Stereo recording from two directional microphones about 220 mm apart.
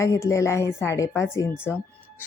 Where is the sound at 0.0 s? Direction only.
15° left (ahead or behind).